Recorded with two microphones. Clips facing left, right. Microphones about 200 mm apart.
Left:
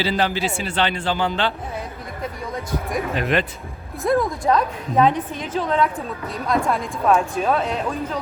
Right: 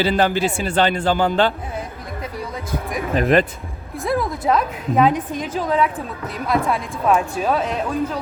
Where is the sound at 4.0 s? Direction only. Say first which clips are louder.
Left 2 dB; 5° right (ahead or behind).